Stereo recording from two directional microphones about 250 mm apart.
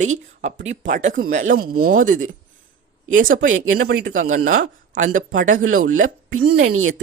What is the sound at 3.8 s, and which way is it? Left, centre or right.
Speech, right.